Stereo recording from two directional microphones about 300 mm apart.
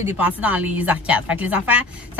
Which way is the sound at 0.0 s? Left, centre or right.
Centre.